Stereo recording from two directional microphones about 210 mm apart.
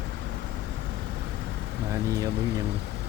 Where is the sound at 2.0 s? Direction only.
15° right (ahead or behind).